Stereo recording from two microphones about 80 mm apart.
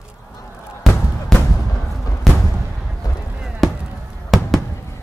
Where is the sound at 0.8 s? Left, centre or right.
Centre.